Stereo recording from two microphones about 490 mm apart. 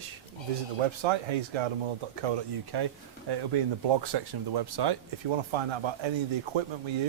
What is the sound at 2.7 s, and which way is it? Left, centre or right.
Speech, right.